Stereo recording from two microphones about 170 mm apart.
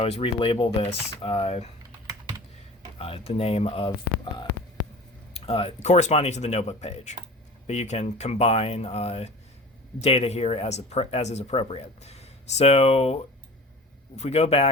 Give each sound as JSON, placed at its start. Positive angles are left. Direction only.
{"t": 0.0, "sound": "speech", "side_deg": 35}
{"t": 3.0, "sound": "speech", "side_deg": 35}